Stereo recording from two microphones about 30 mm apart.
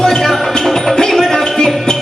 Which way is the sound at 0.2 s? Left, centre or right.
Centre.